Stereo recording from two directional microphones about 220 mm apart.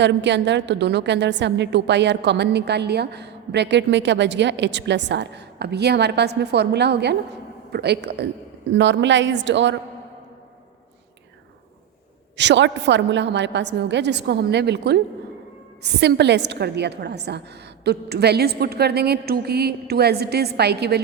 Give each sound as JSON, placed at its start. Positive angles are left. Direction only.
{"t": 0.0, "sound": "a woman's voice", "side_deg": -50}
{"t": 12.4, "sound": "a woman's voice", "side_deg": -55}